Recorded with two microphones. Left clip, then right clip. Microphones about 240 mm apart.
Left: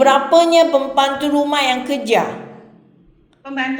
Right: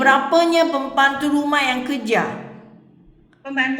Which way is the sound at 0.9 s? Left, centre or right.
Right.